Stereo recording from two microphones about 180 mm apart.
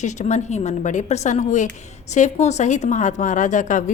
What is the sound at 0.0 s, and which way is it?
A woman's voice, 40° left (ahead or behind).